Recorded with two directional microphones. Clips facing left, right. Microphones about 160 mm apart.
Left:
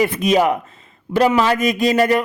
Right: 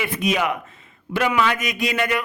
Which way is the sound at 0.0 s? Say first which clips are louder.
Left 7 dB; 35° left (ahead or behind).